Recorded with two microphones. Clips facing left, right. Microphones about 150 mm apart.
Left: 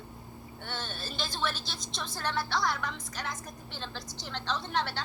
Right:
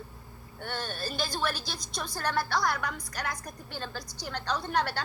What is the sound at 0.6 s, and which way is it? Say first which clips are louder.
A woman's voice: right 5 dB; 10° right (ahead or behind).